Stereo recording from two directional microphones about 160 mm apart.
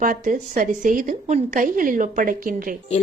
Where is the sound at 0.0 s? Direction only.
55° right (ahead or behind).